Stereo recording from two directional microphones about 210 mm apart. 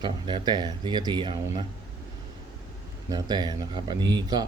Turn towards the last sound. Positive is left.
turn(degrees=-20)  # may be behind; listen again after turning